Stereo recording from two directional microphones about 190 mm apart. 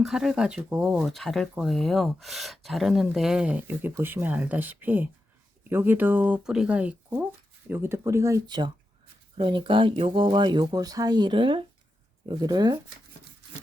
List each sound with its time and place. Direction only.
0.0 s speech: centre (ahead or behind); by 12.8 s 20° right (ahead or behind)